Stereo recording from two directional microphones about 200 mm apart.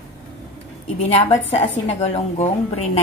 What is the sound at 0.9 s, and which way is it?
A woman's voice, 30° left (ahead or behind).